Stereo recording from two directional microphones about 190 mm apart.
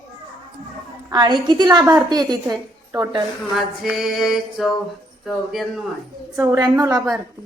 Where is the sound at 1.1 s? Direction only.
20° right (ahead or behind).